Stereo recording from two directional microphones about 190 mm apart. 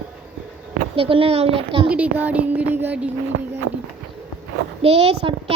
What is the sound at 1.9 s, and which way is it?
Speech, 10° right (ahead or behind).